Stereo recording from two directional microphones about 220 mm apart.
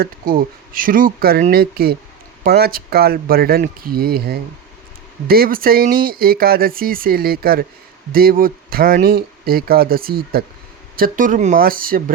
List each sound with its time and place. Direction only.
0.0 s speech: 40° right (ahead or behind)